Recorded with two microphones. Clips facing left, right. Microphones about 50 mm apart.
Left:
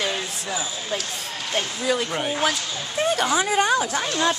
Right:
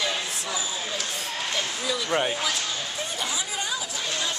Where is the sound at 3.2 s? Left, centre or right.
Left.